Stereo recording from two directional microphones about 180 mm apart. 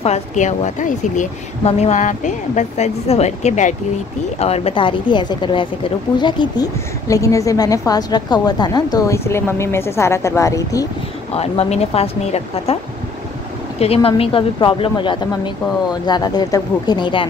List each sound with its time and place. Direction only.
0.0 s a woman's voice: 40° left (ahead or behind); by 10.9 s 20° left (ahead or behind)
11.3 s speech: 35° left (ahead or behind)
13.7 s a woman's voice: 35° left (ahead or behind)